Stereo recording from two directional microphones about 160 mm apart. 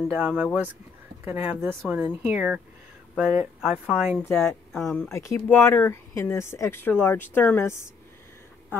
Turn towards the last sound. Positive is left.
turn(degrees=15)  # may be behind; listen again after turning